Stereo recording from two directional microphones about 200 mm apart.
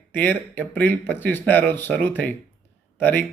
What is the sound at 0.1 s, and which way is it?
Speech, 10° left (ahead or behind).